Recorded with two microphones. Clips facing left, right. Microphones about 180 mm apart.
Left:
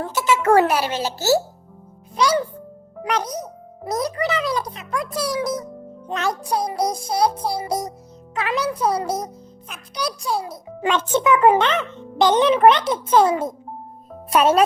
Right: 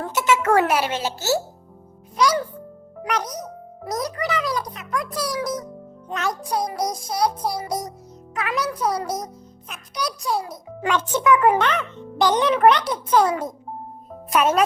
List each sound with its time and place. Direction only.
0.4 s a child's voice: 35° left (ahead or behind)
2.1 s a child's voice: 25° left (ahead or behind)